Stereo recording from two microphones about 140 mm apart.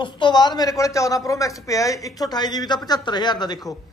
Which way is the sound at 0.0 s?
30° left (ahead or behind).